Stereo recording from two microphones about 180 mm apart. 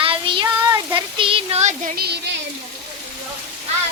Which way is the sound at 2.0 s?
65° right (ahead or behind).